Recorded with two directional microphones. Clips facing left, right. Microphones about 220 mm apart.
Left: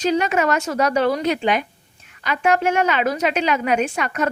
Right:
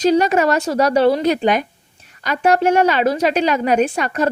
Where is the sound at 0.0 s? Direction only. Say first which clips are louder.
Right 5 dB; 35° right (ahead or behind).